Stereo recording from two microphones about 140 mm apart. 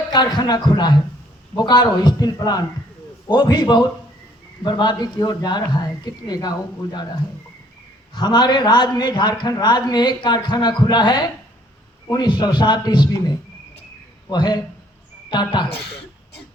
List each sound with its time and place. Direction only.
0.1 s a man's voice: 30° left (ahead or behind)
8.1 s a man's voice: 30° left (ahead or behind)